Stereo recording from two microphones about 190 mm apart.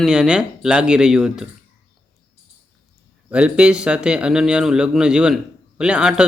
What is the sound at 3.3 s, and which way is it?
Speech, 5° right (ahead or behind).